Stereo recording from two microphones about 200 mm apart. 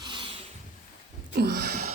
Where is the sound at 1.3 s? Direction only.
55° right (ahead or behind).